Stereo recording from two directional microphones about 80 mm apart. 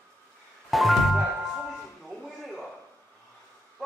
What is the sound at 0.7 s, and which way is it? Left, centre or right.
Music, centre.